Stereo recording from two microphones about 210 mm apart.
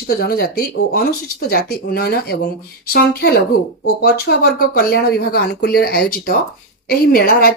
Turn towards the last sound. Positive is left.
turn(degrees=45)  # may be behind; listen again after turning